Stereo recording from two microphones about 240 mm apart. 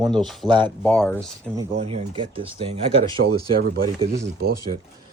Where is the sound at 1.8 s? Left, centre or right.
Right.